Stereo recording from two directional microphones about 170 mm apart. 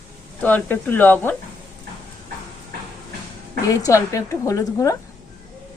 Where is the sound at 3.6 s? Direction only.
20° left (ahead or behind).